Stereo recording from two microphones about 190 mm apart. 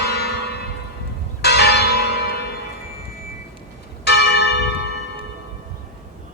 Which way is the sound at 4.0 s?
60° left (ahead or behind).